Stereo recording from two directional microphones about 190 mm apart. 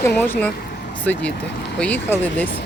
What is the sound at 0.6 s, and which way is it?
Vehicle, 55° left (ahead or behind).